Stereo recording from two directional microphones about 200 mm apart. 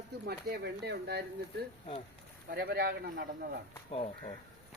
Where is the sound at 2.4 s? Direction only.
50° right (ahead or behind).